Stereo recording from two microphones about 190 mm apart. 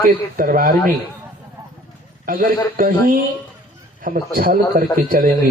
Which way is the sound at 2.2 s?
45° right (ahead or behind).